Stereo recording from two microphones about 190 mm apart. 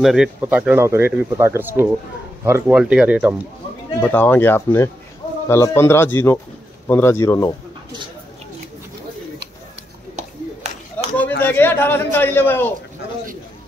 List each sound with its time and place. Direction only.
0.0 s speech: centre (ahead or behind)
4.0 s speech: 10° left (ahead or behind)
10.1 s a sound: 35° right (ahead or behind)
11.4 s a man's voice: 10° left (ahead or behind)